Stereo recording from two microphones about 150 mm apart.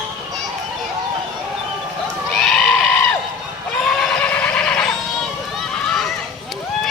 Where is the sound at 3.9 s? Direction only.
5° left (ahead or behind).